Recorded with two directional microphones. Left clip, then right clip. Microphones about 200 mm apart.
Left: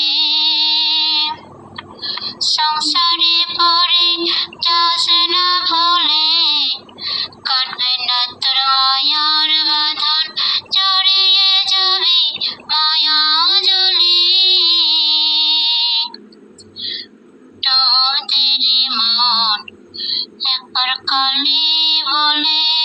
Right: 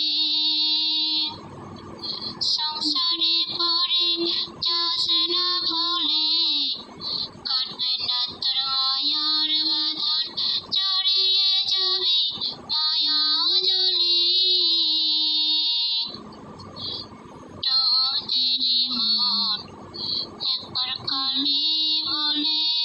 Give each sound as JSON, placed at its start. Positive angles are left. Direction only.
{"t": 0.0, "sound": "a sound", "side_deg": 50}
{"t": 2.0, "sound": "child singing", "side_deg": 50}
{"t": 16.8, "sound": "whispering", "side_deg": 50}
{"t": 17.6, "sound": "synthetic singing", "side_deg": 50}